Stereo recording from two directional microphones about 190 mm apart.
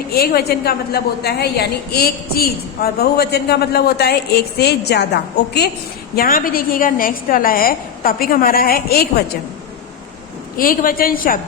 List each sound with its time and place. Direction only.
0.1 s a woman's voice: 55° left (ahead or behind)
10.6 s a woman's voice: 50° left (ahead or behind)